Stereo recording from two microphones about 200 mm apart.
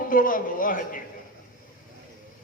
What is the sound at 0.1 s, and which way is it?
Speech, 45° left (ahead or behind).